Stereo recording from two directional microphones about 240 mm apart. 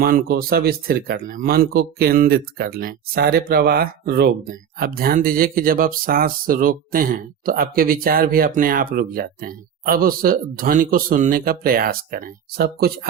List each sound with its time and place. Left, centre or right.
0.0 s speech: right